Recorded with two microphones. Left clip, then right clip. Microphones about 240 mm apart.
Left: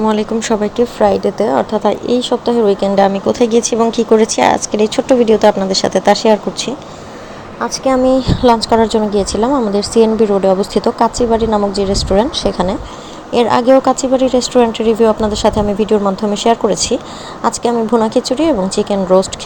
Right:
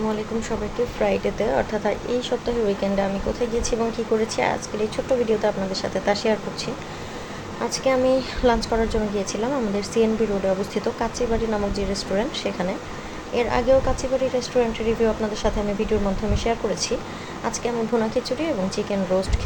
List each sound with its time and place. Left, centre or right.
0.1 s speech: left
7.6 s speech: left